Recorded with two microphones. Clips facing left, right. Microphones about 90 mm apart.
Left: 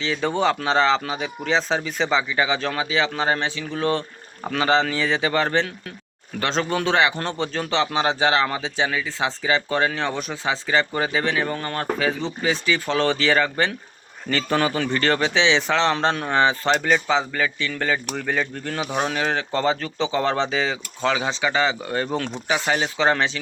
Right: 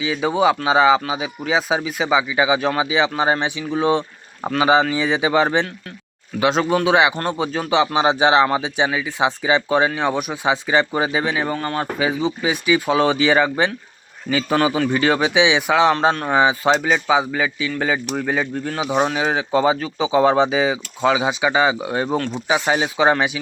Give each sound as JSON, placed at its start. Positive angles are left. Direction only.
{"t": 0.0, "sound": "speech", "side_deg": -10}